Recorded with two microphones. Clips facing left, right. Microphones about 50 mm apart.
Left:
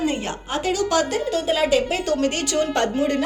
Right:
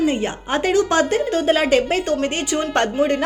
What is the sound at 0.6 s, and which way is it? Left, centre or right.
A woman's voice, right.